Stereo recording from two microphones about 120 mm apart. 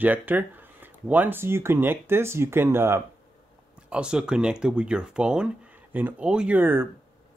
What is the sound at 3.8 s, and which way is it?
Speech, 10° right (ahead or behind).